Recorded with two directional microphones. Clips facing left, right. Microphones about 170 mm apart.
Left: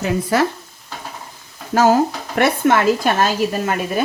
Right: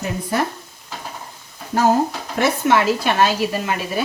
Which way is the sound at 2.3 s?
55° left (ahead or behind).